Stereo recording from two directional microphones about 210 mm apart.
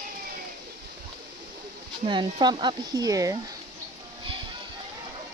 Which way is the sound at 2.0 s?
20° right (ahead or behind).